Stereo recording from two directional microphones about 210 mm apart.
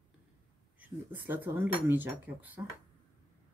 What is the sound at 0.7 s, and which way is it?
Speech, 10° right (ahead or behind).